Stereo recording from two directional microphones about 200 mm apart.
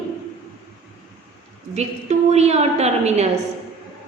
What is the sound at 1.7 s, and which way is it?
A woman's voice, 35° right (ahead or behind).